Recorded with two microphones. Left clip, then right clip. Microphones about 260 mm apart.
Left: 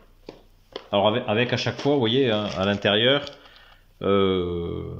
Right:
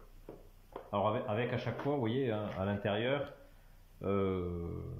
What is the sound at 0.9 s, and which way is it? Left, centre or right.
Speech, left.